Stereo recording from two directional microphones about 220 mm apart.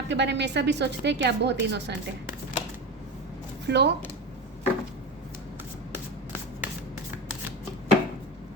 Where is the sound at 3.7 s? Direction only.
50° right (ahead or behind).